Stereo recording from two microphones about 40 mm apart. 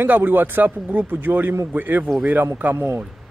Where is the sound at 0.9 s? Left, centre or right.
Right.